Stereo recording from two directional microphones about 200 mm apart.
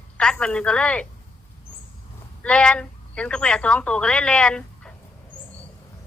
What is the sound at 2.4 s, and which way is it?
Speech, 5° left (ahead or behind).